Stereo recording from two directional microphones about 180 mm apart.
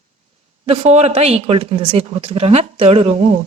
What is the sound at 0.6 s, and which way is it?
A woman's voice, 35° right (ahead or behind).